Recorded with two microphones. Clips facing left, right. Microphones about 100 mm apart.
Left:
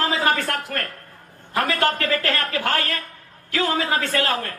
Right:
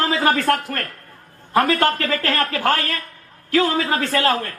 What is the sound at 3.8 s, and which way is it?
Speech, 35° right (ahead or behind).